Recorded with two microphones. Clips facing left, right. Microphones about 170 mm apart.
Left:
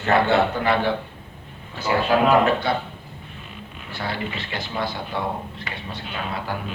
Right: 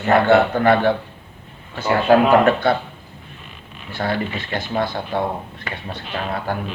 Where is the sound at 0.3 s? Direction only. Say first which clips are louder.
Right 5 dB; 50° right (ahead or behind).